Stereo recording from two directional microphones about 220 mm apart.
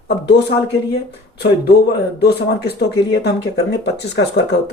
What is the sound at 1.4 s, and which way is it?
Speech, 50° left (ahead or behind).